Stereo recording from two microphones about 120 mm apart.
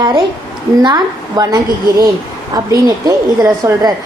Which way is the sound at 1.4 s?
35° right (ahead or behind).